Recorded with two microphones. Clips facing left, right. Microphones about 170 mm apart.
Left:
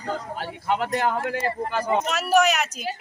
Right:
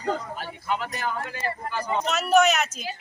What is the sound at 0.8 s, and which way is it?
Speech, 70° left (ahead or behind).